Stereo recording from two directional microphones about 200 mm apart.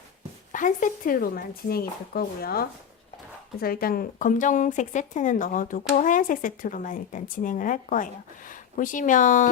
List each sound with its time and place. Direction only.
0.5 s speech: 40° left (ahead or behind)